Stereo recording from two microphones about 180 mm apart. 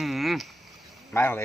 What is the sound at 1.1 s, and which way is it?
Speech, 15° left (ahead or behind).